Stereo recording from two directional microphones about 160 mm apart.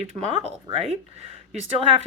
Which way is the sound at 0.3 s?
40° right (ahead or behind).